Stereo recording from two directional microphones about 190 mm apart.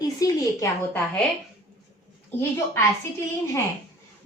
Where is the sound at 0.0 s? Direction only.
20° left (ahead or behind).